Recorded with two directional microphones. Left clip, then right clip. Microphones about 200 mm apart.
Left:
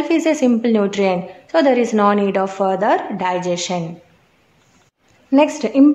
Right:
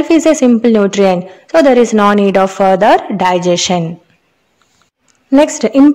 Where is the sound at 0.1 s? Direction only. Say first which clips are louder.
Right 7 dB; 35° right (ahead or behind).